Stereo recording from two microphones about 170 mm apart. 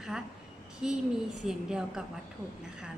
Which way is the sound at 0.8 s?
5° right (ahead or behind).